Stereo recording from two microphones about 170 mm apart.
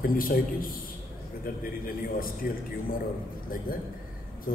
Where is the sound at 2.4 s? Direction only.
60° left (ahead or behind).